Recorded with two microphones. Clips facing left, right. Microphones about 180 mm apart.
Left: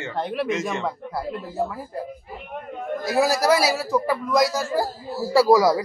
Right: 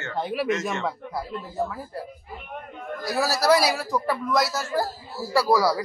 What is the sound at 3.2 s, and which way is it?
A man's voice, 10° left (ahead or behind).